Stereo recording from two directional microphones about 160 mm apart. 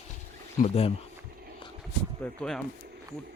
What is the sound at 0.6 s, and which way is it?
Speech, 40° left (ahead or behind).